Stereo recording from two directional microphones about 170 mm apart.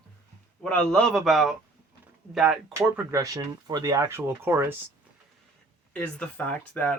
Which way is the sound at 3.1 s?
20° right (ahead or behind).